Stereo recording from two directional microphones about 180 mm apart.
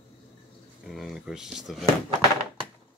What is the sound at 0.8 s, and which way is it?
Speech, centre (ahead or behind).